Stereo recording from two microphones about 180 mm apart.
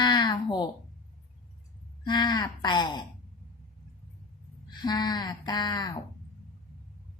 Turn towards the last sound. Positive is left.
turn(degrees=25)  # may be behind; listen again after turning